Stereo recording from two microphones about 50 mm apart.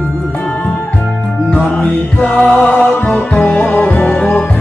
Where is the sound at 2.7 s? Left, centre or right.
Left.